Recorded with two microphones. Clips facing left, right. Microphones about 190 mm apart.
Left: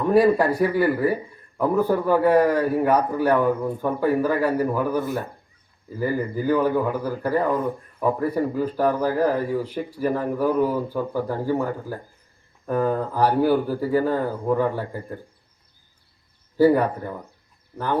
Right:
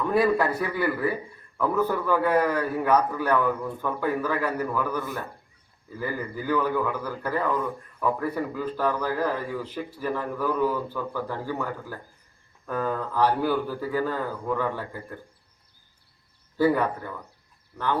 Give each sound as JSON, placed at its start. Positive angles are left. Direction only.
{"t": 0.0, "sound": "a man's voice", "side_deg": 35}
{"t": 4.7, "sound": "speech", "side_deg": 15}
{"t": 6.0, "sound": "a man's voice", "side_deg": 35}
{"t": 12.8, "sound": "a man's voice", "side_deg": 35}
{"t": 16.6, "sound": "a man's voice", "side_deg": 35}